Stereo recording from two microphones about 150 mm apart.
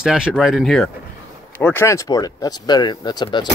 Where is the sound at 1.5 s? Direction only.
15° left (ahead or behind).